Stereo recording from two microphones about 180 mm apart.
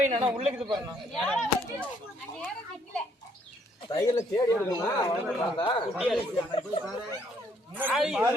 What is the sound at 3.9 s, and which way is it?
Speech, 20° left (ahead or behind).